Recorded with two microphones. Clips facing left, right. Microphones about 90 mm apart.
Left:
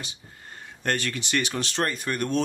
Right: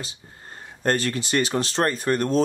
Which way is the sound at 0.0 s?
35° right (ahead or behind).